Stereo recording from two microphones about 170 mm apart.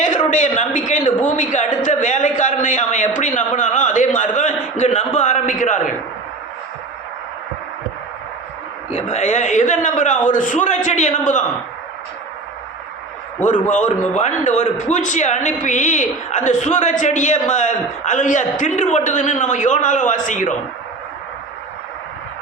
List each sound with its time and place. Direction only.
0.0 s a man's voice: 45° left (ahead or behind)
8.9 s a man's voice: 40° left (ahead or behind)
13.4 s a man's voice: 45° left (ahead or behind)